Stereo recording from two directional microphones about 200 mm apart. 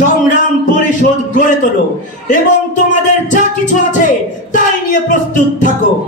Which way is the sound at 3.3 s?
40° left (ahead or behind).